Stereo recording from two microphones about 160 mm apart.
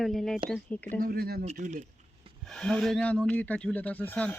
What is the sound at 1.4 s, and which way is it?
Speech, 45° right (ahead or behind).